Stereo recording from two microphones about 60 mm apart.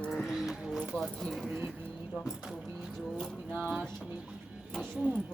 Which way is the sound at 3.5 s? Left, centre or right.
Centre.